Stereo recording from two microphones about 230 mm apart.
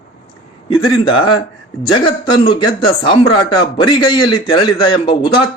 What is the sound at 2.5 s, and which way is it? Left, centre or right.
A man's voice, centre.